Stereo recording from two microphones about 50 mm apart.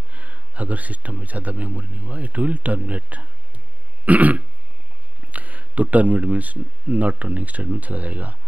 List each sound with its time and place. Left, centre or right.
0.1 s speech: right